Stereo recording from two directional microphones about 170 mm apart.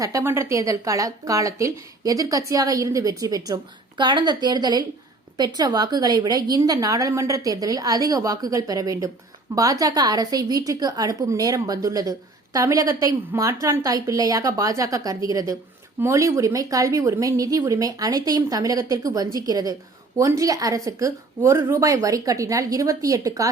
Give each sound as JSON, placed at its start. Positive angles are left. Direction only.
{"t": 0.0, "sound": "a woman's voice", "side_deg": -20}